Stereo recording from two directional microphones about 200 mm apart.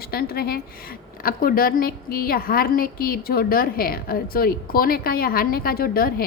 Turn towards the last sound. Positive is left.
turn(degrees=50)  # may be behind; listen again after turning